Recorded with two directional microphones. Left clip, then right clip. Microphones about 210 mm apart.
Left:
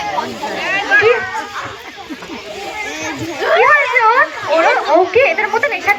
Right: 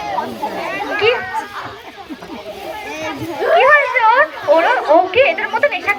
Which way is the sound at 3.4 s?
30° right (ahead or behind).